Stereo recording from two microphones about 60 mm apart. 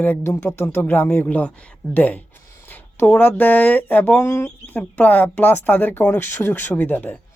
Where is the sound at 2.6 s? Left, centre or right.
Left.